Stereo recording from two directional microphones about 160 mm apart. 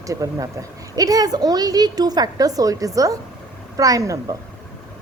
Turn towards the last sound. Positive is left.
turn(degrees=-20)  # may be behind; listen again after turning